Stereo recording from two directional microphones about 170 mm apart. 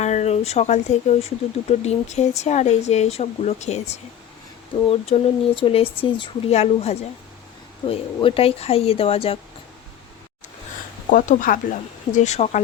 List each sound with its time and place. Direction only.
0.0 s speech: 40° left (ahead or behind)
11.1 s speech: 50° left (ahead or behind)